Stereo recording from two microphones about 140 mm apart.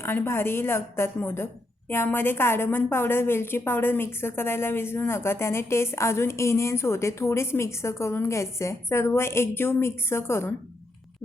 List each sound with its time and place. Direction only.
0.0 s a woman's voice: 15° left (ahead or behind)